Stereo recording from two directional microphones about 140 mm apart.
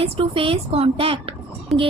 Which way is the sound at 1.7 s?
Centre (ahead or behind).